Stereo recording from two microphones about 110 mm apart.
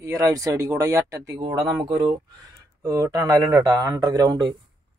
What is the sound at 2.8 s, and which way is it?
Speech, 30° right (ahead or behind).